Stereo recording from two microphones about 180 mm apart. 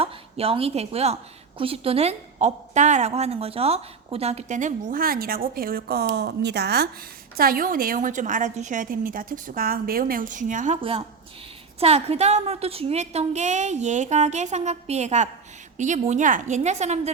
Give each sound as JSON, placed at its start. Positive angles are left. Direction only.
{"t": 0.0, "sound": "a woman's voice", "side_deg": -30}
{"t": 7.3, "sound": "a woman's voice", "side_deg": -55}
{"t": 10.8, "sound": "a woman's voice", "side_deg": -30}